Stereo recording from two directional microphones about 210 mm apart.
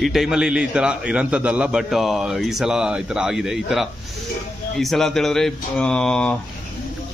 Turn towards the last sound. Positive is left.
turn(degrees=5)  # may be behind; listen again after turning